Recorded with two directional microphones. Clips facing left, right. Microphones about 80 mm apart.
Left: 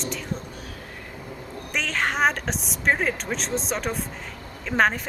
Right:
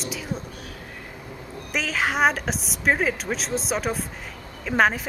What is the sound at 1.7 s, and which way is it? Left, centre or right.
A woman's voice, centre.